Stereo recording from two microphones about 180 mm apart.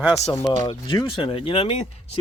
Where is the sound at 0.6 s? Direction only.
25° left (ahead or behind).